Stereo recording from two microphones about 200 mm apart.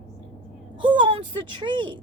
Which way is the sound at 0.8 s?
25° right (ahead or behind).